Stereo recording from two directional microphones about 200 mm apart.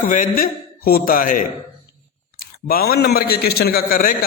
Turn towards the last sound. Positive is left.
turn(degrees=45)  # may be behind; listen again after turning